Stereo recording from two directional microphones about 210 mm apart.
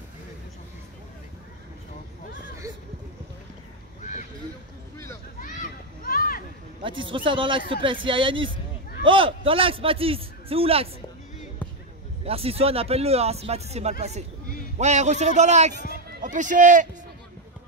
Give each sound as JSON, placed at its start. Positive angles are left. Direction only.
{"t": 4.0, "sound": "a sound", "side_deg": 35}
{"t": 5.4, "sound": "children playing", "side_deg": 40}
{"t": 6.8, "sound": "a man's voice", "side_deg": -25}
{"t": 12.3, "sound": "a man's voice", "side_deg": -25}
{"t": 15.9, "sound": "run", "side_deg": -40}